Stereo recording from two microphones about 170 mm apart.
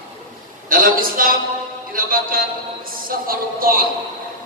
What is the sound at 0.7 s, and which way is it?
A man's voice, 55° right (ahead or behind).